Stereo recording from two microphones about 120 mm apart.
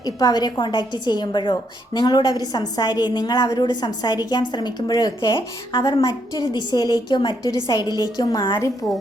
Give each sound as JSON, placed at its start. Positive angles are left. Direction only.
{"t": 0.0, "sound": "a woman's voice", "side_deg": 30}